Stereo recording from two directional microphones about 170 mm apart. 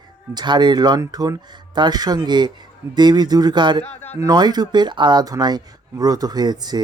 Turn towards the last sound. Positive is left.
turn(degrees=-25)  # may be behind; listen again after turning